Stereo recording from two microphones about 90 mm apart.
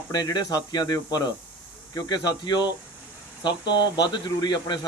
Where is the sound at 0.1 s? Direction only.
50° left (ahead or behind).